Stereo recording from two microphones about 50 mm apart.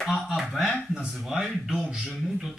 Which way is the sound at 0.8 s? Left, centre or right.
Centre.